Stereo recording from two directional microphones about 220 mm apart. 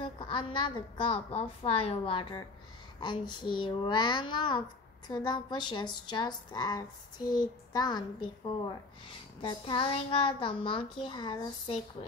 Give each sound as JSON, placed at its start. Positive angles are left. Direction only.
{"t": 0.0, "sound": "a child's voice", "side_deg": 20}